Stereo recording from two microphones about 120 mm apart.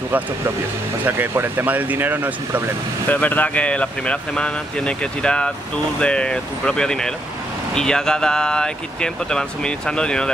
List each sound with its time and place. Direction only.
1.0 s speech: 20° right (ahead or behind)
3.1 s speech: 15° left (ahead or behind)